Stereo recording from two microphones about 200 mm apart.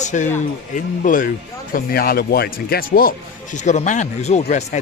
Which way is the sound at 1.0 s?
40° left (ahead or behind).